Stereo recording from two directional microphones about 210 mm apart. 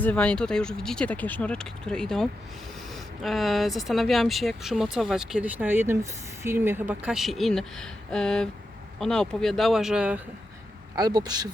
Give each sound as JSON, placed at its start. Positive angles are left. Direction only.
{"t": 0.0, "sound": "speech", "side_deg": 5}
{"t": 10.9, "sound": "speech", "side_deg": -20}